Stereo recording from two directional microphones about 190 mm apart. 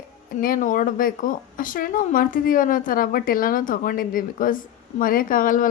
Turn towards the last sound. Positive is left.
turn(degrees=45)  # may be behind; listen again after turning